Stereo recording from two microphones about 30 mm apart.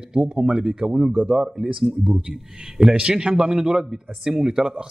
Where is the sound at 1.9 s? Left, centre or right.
Right; by 4.7 s centre.